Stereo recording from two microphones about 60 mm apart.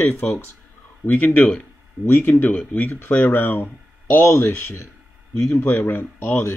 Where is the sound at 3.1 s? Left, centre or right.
Left.